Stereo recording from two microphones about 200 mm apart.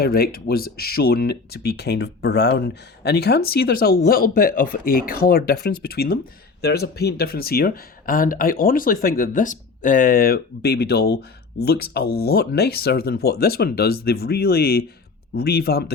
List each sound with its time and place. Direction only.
0.0 s speech: 50° left (ahead or behind)